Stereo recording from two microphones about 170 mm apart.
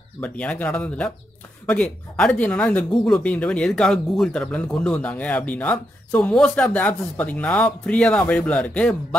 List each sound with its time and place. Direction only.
0.2 s speech: 10° left (ahead or behind)